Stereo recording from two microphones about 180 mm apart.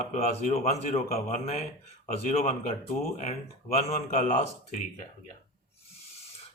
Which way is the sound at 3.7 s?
40° left (ahead or behind).